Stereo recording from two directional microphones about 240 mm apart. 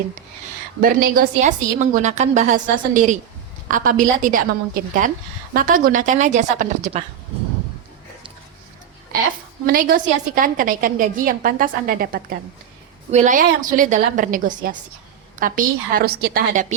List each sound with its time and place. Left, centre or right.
0.8 s a woman's voice: right
9.6 s a woman's voice: right